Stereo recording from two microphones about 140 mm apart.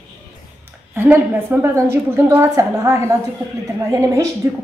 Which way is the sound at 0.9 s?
15° right (ahead or behind).